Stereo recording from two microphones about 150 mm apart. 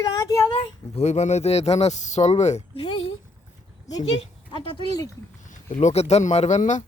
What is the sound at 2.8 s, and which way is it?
A woman's voice, 35° left (ahead or behind).